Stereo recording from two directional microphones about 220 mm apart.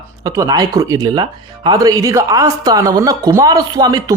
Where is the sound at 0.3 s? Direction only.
15° right (ahead or behind).